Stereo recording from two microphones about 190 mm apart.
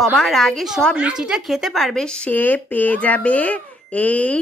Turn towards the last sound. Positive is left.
turn(degrees=10)  # may be behind; listen again after turning